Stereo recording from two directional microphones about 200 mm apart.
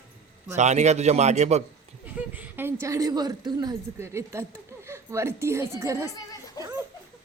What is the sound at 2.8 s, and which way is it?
A woman's voice, 15° right (ahead or behind).